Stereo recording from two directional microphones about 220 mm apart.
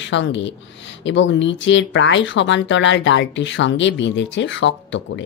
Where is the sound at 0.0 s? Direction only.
55° left (ahead or behind).